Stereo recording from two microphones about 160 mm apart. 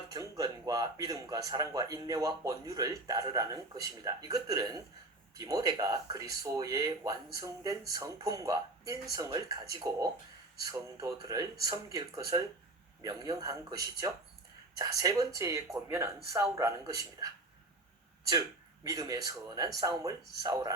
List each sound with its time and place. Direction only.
0.1 s speech: 25° right (ahead or behind)
18.3 s speech: 25° right (ahead or behind)